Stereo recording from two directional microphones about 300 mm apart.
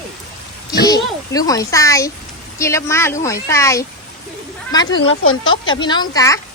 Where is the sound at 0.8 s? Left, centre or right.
Centre.